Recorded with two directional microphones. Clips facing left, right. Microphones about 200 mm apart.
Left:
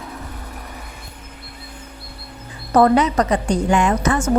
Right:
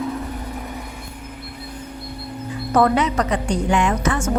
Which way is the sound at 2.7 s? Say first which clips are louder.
Left 3 dB; 35° left (ahead or behind).